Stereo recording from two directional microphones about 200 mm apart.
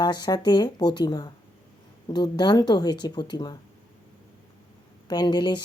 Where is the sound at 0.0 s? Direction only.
20° left (ahead or behind).